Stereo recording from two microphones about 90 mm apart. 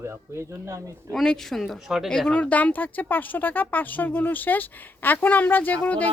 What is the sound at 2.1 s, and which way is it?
Speech, 10° left (ahead or behind).